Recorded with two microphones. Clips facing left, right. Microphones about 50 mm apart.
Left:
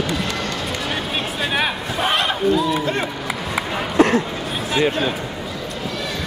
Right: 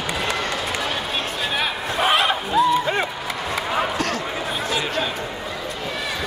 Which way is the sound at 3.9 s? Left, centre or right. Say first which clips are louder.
Left 9 dB; left.